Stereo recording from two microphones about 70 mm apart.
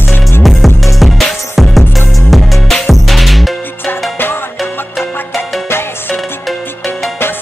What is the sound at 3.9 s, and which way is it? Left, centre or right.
Music, left.